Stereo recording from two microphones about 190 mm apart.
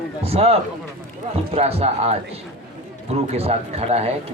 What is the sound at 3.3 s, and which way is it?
Speech, 35° right (ahead or behind).